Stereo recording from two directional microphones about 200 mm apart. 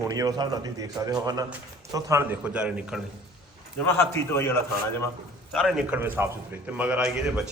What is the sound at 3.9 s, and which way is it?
Speech, 10° left (ahead or behind).